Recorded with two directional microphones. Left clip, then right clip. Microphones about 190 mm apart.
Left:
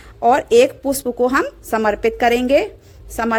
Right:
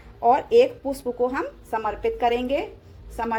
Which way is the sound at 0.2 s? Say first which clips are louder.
Left 5 dB; 45° left (ahead or behind).